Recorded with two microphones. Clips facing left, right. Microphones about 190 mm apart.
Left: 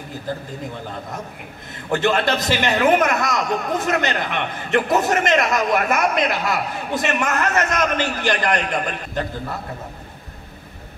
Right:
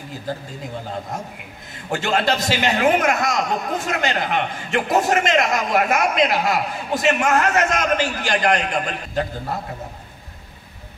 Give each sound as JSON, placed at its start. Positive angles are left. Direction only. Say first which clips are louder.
{"t": 1.9, "sound": "a man's voice", "louder": "left 2 dB", "side_deg": 55}